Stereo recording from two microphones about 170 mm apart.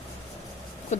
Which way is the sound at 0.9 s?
40° left (ahead or behind).